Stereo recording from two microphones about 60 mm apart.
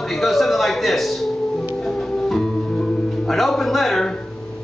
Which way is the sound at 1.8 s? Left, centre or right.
Centre.